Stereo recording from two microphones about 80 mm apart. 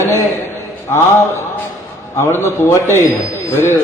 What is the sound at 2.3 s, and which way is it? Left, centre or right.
Speech, left.